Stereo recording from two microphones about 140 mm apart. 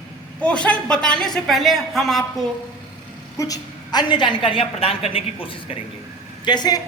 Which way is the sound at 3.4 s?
30° left (ahead or behind).